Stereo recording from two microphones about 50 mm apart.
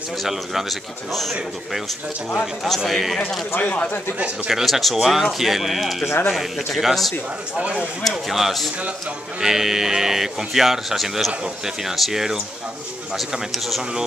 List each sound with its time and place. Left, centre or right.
0.2 s speech: centre
2.4 s speech: centre
3.6 s speech: left
4.5 s speech: centre
7.5 s speech: right
8.0 s speech: centre